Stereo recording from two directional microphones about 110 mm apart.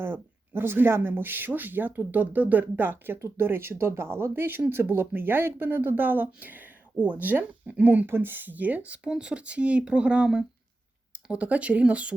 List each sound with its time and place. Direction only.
0.0 s speech: 20° right (ahead or behind)